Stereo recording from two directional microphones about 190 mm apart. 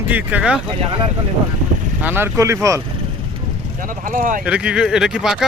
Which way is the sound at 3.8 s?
45° right (ahead or behind).